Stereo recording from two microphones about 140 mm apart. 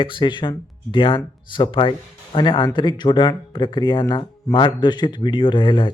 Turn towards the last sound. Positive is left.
turn(degrees=35)  # may be behind; listen again after turning